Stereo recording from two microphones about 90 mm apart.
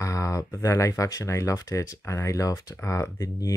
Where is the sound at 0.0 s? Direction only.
35° left (ahead or behind).